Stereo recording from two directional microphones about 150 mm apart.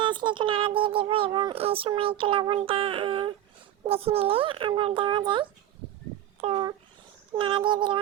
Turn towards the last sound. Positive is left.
turn(degrees=-30)  # may be behind; listen again after turning